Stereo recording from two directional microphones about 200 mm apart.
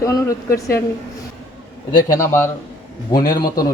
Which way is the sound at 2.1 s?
10° left (ahead or behind).